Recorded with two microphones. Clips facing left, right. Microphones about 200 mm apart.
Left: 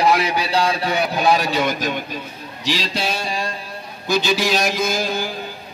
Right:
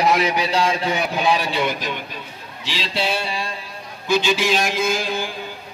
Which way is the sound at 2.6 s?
40° left (ahead or behind).